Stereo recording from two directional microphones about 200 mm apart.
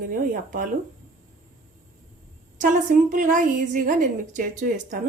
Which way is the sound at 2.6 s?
40° right (ahead or behind).